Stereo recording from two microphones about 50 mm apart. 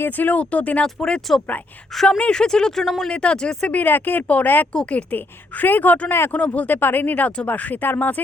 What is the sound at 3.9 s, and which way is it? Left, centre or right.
Speech, left.